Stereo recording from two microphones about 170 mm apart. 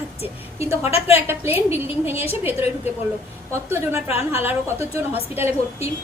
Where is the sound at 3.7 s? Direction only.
15° right (ahead or behind).